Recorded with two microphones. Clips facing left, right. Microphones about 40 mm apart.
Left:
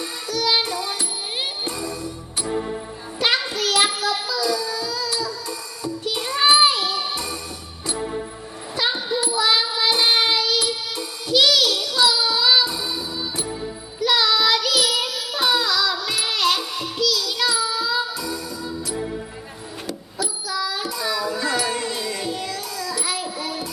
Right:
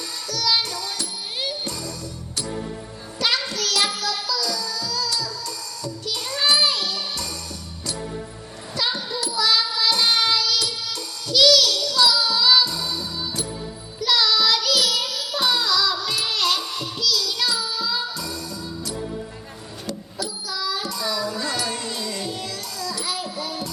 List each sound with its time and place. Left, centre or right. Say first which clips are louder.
0.3 s music: left 2 dB; left
3.2 s child singing: left 2 dB; left
7.9 s music: left 4 dB; left
8.7 s child singing: left 3 dB; left
18.9 s music: left 3 dB; centre
19.9 s bicycle bell: left 1 dB; centre